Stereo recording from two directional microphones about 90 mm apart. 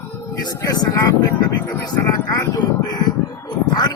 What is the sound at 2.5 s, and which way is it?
Speech, 50° left (ahead or behind).